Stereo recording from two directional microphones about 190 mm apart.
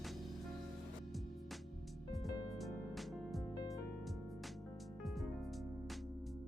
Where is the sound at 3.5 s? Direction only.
20° left (ahead or behind).